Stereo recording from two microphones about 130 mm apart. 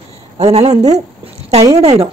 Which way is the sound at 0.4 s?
50° right (ahead or behind).